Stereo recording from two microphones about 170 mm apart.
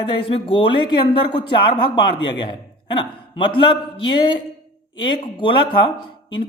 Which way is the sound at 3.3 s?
30° left (ahead or behind).